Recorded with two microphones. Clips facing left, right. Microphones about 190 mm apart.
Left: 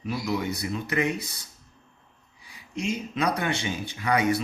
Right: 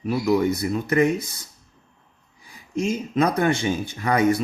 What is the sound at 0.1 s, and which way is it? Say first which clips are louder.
Speech: right 8 dB; 50° right (ahead or behind).